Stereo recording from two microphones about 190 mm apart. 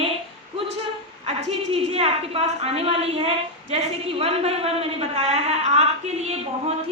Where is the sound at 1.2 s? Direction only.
30° right (ahead or behind).